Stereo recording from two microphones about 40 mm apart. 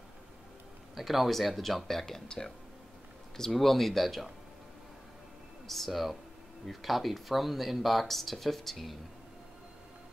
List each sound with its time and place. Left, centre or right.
0.9 s speech: centre
3.5 s speech: centre
5.7 s speech: centre